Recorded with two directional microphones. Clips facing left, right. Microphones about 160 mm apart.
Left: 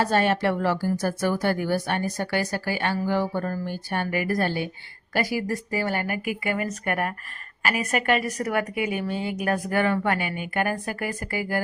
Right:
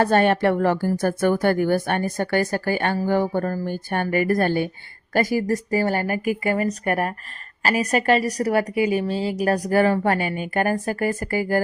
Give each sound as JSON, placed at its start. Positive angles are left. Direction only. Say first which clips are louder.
{"t": 0.0, "sound": "a woman's voice", "louder": "right 4 dB", "side_deg": -55}